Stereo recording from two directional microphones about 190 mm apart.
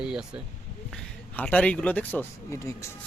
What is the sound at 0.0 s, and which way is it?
Speech, 5° right (ahead or behind).